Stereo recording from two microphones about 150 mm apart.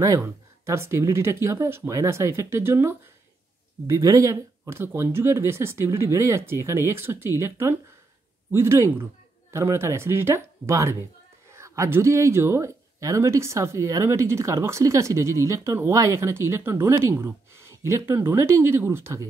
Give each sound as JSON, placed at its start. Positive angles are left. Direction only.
{"t": 0.0, "sound": "speech", "side_deg": -20}